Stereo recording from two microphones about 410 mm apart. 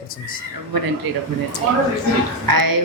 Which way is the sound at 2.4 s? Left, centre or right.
Right.